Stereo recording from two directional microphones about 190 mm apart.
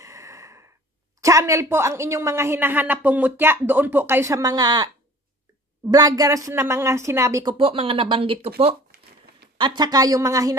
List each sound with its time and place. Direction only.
0.0 s a sound: 15° right (ahead or behind)
1.2 s a woman's voice: 15° right (ahead or behind)
7.5 s speech: 30° right (ahead or behind)
9.6 s speech: 25° right (ahead or behind)